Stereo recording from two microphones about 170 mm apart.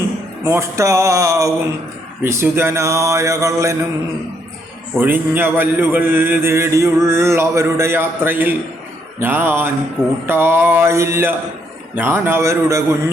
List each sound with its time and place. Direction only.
0.4 s mantra: 15° right (ahead or behind)
4.9 s mantra: 10° right (ahead or behind)